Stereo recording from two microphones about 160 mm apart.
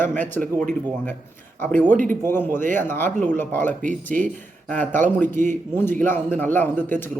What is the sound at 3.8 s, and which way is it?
Speech, 55° right (ahead or behind).